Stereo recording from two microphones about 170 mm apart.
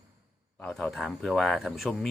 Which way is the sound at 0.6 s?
5° left (ahead or behind).